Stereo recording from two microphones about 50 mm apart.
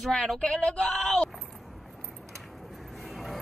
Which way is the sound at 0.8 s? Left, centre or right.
Centre.